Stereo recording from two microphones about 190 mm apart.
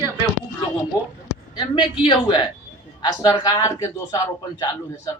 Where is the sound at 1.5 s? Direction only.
25° left (ahead or behind).